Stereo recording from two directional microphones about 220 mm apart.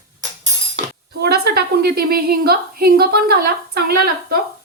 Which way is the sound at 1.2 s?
45° right (ahead or behind).